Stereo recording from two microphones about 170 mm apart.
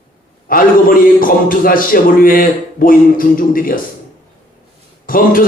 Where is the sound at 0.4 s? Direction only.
55° left (ahead or behind).